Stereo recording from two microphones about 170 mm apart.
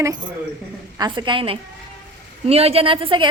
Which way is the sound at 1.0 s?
25° right (ahead or behind).